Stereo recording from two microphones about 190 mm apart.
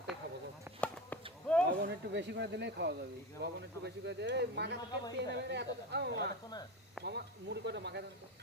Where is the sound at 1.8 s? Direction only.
65° right (ahead or behind).